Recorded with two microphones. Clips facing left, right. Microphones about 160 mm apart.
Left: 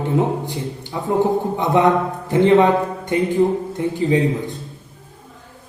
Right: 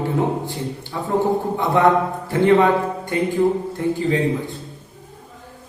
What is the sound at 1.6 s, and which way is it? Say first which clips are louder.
A man's voice: even; 20° left (ahead or behind).